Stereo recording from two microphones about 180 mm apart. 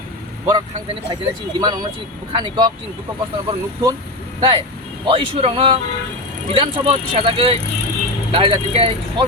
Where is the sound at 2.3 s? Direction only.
25° right (ahead or behind).